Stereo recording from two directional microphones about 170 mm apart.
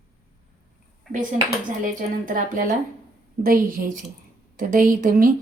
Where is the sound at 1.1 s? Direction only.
Centre (ahead or behind).